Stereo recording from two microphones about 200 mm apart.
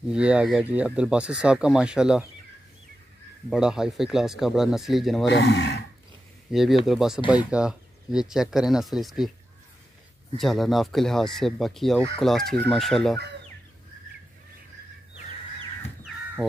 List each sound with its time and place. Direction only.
0.1 s speech: 5° right (ahead or behind)
3.4 s speech: 5° right (ahead or behind)
5.2 s speech: 60° left (ahead or behind)
6.5 s speech: centre (ahead or behind)
10.3 s speech: centre (ahead or behind)